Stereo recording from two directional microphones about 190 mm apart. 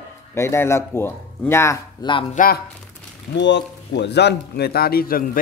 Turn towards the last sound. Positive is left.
turn(degrees=50)  # may be behind; listen again after turning